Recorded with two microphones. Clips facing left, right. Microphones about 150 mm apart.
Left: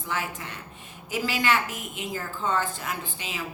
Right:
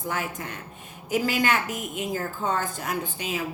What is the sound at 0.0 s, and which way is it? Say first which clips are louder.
Speech: right 2 dB; 45° right (ahead or behind).